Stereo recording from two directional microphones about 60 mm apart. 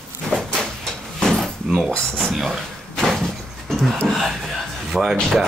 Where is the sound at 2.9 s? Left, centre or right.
Centre.